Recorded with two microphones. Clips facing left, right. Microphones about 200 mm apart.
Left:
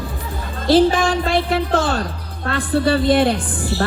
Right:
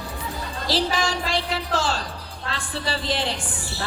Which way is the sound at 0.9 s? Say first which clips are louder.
Left 7 dB; 55° left (ahead or behind).